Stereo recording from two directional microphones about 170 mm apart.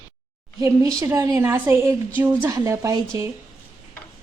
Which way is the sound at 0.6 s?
20° right (ahead or behind).